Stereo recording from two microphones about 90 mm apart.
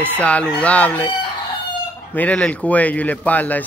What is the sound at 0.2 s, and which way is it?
Speech, 15° left (ahead or behind).